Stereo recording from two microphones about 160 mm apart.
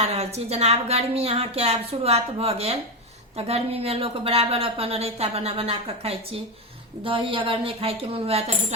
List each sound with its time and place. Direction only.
0.0 s speech: 40° right (ahead or behind)